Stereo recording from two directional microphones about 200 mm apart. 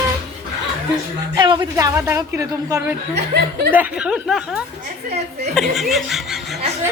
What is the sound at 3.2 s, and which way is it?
Speech, 55° right (ahead or behind).